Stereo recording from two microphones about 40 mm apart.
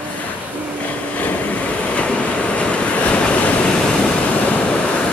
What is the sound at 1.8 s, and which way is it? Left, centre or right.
Waves, left.